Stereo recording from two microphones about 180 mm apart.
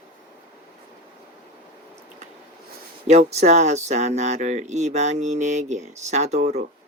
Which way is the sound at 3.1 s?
35° right (ahead or behind).